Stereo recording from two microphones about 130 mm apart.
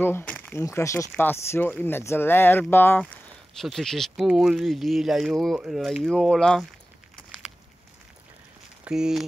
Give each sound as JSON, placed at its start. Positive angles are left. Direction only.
{"t": 0.0, "sound": "speech", "side_deg": 15}
{"t": 8.8, "sound": "speech", "side_deg": -5}